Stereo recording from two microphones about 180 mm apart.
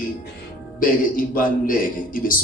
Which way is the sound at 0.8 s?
50° left (ahead or behind).